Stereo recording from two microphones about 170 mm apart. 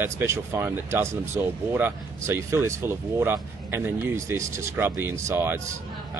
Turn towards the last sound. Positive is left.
turn(degrees=-15)  # may be behind; listen again after turning